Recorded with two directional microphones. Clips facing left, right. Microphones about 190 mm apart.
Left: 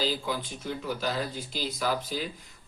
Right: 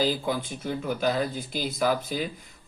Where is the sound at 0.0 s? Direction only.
50° right (ahead or behind).